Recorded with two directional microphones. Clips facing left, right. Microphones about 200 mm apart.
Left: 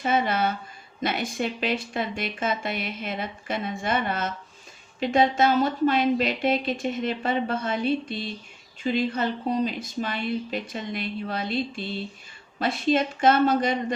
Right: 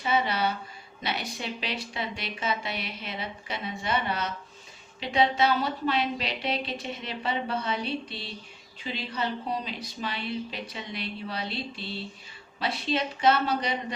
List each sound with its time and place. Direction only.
0.0 s speech: 50° left (ahead or behind)